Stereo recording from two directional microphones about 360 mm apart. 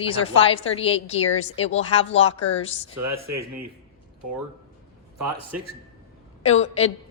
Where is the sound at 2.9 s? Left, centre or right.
Right.